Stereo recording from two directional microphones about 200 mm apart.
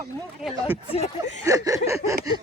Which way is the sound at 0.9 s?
30° left (ahead or behind).